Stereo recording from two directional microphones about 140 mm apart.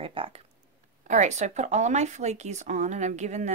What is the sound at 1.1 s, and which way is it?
Speech, 55° right (ahead or behind).